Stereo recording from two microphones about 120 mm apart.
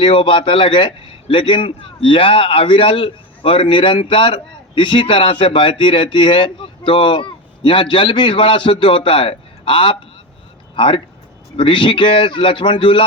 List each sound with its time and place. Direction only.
0.0 s a man's voice: 45° left (ahead or behind)